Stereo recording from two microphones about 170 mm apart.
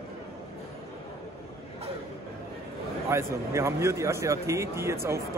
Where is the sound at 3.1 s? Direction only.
15° right (ahead or behind).